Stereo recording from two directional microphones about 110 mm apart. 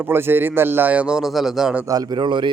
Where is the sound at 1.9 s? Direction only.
40° right (ahead or behind).